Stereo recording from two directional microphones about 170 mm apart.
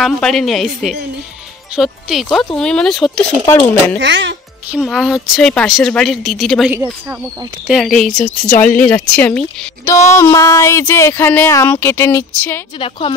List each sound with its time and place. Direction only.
0.0 s a woman's voice: centre (ahead or behind)
4.0 s speech: 90° right
4.8 s a woman's voice: centre (ahead or behind)
6.7 s speech: 10° right (ahead or behind)
7.7 s a woman's voice: centre (ahead or behind)
8.2 s speech: 10° left (ahead or behind)
12.7 s a woman's voice: 30° left (ahead or behind)